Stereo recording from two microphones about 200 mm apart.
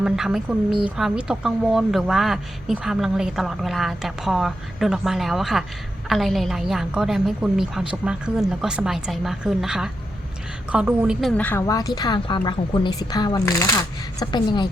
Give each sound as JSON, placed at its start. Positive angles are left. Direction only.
{"t": 0.0, "sound": "speech", "side_deg": -5}